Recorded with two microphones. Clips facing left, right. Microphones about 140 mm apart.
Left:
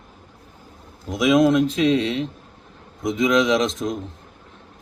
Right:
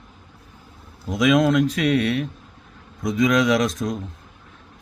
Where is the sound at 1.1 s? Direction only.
20° left (ahead or behind).